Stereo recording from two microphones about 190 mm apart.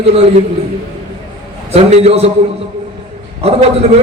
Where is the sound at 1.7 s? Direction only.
35° right (ahead or behind).